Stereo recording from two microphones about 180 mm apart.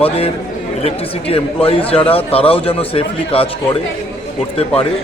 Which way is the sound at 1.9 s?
30° left (ahead or behind).